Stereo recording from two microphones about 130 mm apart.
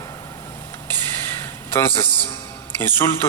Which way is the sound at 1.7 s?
20° left (ahead or behind).